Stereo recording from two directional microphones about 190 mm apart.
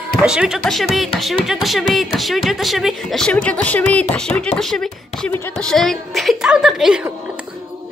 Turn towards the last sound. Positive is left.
turn(degrees=-5)  # may be behind; listen again after turning